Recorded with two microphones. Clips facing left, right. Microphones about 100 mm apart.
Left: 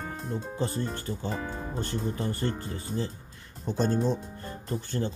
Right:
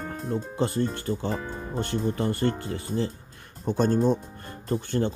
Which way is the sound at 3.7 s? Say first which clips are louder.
Right 4 dB; 50° right (ahead or behind).